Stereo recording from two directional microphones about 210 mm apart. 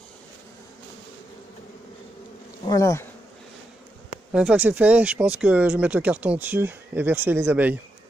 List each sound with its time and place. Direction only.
2.6 s speech: 15° left (ahead or behind)
4.3 s speech: 5° right (ahead or behind)